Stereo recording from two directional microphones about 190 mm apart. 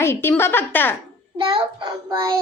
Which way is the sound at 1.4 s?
25° right (ahead or behind).